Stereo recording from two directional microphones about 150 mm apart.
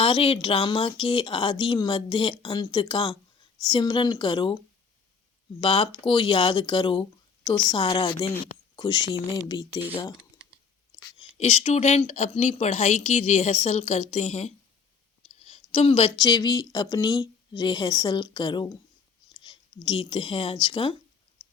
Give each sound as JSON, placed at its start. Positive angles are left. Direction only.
{"t": 0.0, "sound": "a woman's voice", "side_deg": 40}
{"t": 5.5, "sound": "a woman's voice", "side_deg": 35}
{"t": 11.2, "sound": "speech", "side_deg": 45}
{"t": 15.4, "sound": "a sound", "side_deg": 45}
{"t": 16.2, "sound": "a woman's voice", "side_deg": 30}